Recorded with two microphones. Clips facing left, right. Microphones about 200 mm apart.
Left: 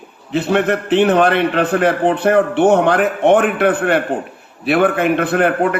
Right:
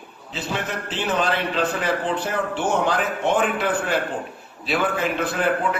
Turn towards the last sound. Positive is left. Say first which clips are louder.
# left 7 dB
turn(degrees=60)  # may be behind; listen again after turning